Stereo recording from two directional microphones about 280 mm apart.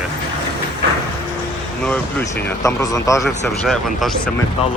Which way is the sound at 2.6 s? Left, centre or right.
Centre.